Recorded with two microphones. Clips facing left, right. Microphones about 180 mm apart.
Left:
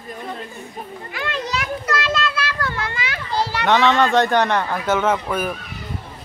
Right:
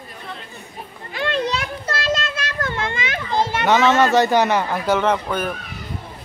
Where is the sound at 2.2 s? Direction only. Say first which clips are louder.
Left 3 dB; 45° right (ahead or behind).